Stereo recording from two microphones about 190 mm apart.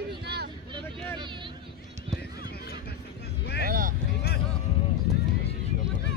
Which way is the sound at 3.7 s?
45° right (ahead or behind).